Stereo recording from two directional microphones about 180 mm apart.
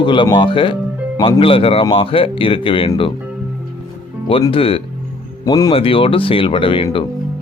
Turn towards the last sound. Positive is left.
turn(degrees=30)  # may be behind; listen again after turning